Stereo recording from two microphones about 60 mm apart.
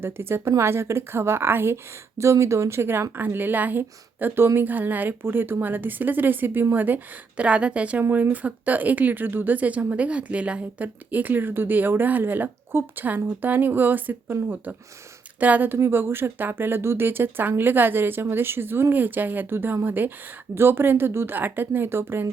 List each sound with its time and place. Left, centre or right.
0.0 s a woman's voice: right